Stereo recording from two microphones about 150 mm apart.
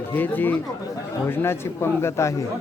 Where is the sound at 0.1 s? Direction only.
10° left (ahead or behind).